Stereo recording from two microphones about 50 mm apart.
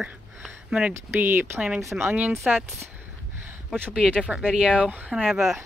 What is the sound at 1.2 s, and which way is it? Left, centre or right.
Speech, right.